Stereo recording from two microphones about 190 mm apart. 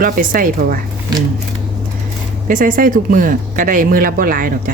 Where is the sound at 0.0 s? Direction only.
50° right (ahead or behind).